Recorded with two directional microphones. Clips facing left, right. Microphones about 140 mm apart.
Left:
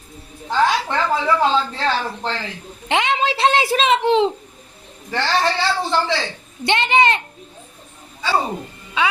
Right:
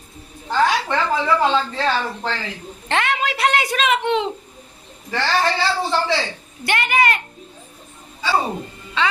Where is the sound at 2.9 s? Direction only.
15° left (ahead or behind).